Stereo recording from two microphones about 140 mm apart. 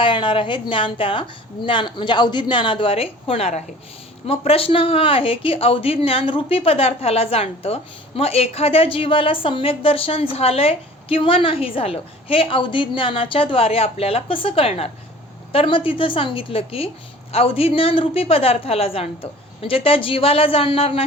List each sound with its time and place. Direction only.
0.0 s speech: 35° left (ahead or behind)